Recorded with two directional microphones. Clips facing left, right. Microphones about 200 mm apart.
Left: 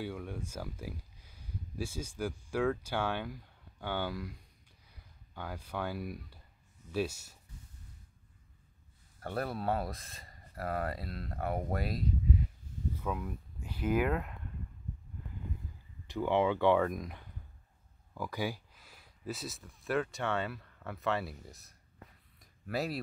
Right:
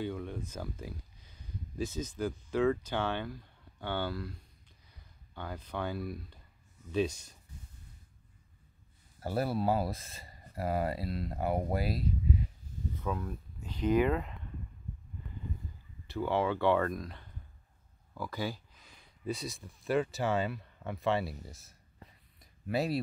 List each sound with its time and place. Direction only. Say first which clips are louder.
0.0 s speech: right 3 dB; 10° left (ahead or behind)
9.2 s speech: right 4 dB; 5° right (ahead or behind)
12.9 s speech: right 2 dB; 10° left (ahead or behind)
16.1 s speech: left 1 dB; 15° left (ahead or behind); by 21.7 s centre (ahead or behind)
22.4 s a sound: right 3 dB; centre (ahead or behind)